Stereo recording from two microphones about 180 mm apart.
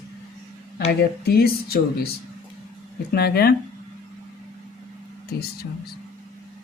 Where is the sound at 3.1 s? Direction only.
60° left (ahead or behind).